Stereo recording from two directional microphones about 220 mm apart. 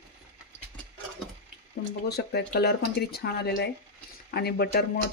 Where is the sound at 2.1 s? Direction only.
45° left (ahead or behind).